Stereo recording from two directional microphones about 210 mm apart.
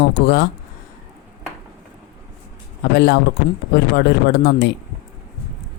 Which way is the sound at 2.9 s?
55° left (ahead or behind).